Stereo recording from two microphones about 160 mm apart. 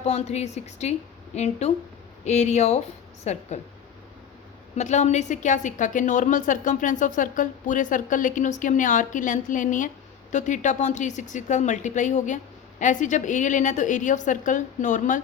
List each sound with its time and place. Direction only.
0.0 s a woman's voice: 40° left (ahead or behind)
4.8 s a woman's voice: 45° left (ahead or behind)